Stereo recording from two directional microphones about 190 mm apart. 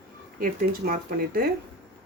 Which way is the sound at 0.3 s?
50° right (ahead or behind).